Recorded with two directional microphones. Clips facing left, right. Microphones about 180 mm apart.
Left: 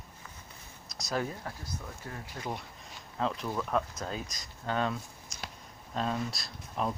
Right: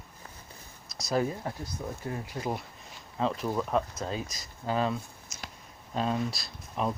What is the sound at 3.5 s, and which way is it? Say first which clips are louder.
Speech: right 4 dB; 15° right (ahead or behind).